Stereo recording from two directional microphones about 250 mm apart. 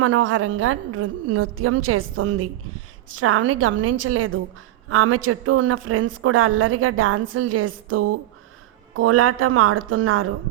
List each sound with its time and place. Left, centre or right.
0.0 s a woman's voice: right